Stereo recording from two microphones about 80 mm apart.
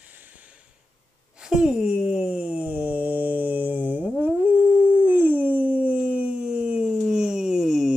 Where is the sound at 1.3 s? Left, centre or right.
Centre.